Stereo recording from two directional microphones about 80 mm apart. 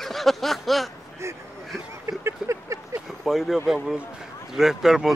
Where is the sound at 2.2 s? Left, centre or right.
Right.